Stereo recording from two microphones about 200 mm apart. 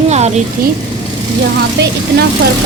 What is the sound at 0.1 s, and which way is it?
Vehicle, 35° right (ahead or behind).